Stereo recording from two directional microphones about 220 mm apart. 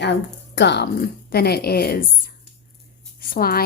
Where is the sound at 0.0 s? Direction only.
50° left (ahead or behind).